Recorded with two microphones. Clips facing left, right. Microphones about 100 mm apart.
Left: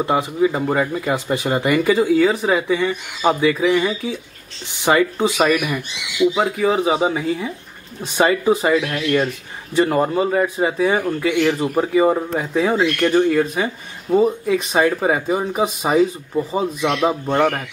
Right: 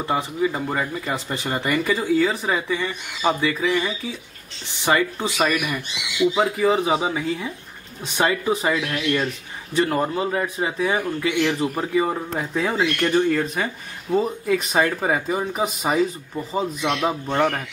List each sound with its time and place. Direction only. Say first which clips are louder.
0.0 s speech: left 5 dB; 15° left (ahead or behind)
6.3 s speech: left 1 dB; 5° left (ahead or behind)
7.0 s speech: left 5 dB; 25° left (ahead or behind)
12.4 s speech: left 5 dB; 5° left (ahead or behind)
13.1 s speech: left 4 dB; 15° left (ahead or behind)
14.2 s speech: left 5 dB; centre (ahead or behind)
14.8 s speech: left 5 dB; 15° left (ahead or behind)